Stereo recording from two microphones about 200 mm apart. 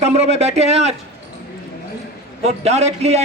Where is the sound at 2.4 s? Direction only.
35° right (ahead or behind).